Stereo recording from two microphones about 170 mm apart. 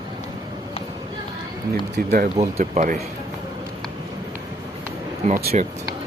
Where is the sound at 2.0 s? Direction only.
65° right (ahead or behind).